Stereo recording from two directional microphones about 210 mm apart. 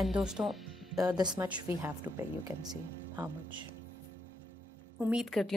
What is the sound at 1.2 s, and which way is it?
Speech, 20° right (ahead or behind).